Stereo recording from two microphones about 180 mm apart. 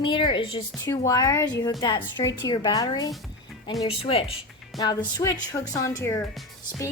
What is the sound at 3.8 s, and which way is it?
Speech, 30° left (ahead or behind).